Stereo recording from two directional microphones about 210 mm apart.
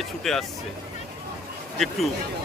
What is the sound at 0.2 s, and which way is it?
Speech, centre (ahead or behind).